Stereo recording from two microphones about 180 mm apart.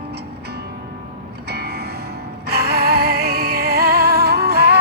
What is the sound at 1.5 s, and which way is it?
Music, 65° right (ahead or behind).